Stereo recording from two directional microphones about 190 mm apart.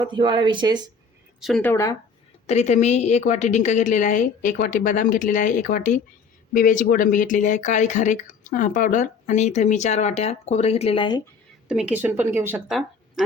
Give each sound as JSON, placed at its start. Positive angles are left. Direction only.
{"t": 0.0, "sound": "speech", "side_deg": -25}
{"t": 1.4, "sound": "a woman's voice", "side_deg": 0}
{"t": 1.7, "sound": "speech", "side_deg": 15}
{"t": 2.5, "sound": "speech", "side_deg": 35}
{"t": 11.7, "sound": "a woman's voice", "side_deg": -5}